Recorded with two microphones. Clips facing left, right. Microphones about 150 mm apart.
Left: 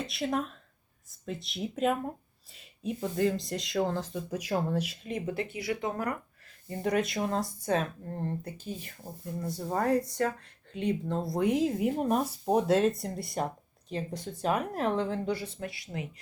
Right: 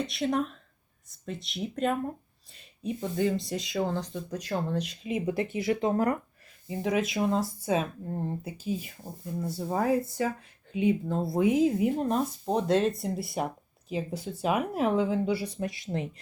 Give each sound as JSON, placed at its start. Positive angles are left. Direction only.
{"t": 0.0, "sound": "speech", "side_deg": 0}
{"t": 5.0, "sound": "speech", "side_deg": -10}
{"t": 6.7, "sound": "speech", "side_deg": 0}